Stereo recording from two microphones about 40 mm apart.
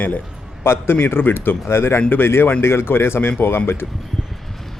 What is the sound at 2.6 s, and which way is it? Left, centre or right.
A man's voice, left.